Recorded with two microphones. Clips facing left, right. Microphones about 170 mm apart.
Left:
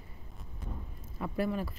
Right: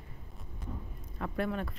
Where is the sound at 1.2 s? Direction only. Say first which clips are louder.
Left 1 dB; 5° left (ahead or behind).